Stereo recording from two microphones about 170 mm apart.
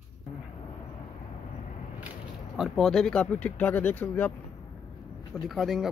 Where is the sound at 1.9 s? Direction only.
5° right (ahead or behind); by 4.3 s 10° left (ahead or behind).